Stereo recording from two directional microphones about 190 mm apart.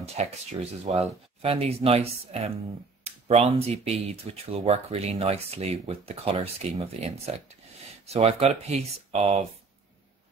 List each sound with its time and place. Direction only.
0.0 s speech: 35° right (ahead or behind)